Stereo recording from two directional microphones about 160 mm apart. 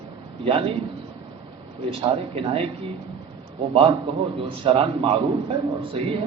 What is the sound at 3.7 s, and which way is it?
A man's voice, 35° right (ahead or behind).